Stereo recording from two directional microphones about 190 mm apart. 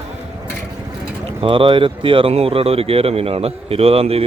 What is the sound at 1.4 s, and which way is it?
Speech, 25° right (ahead or behind).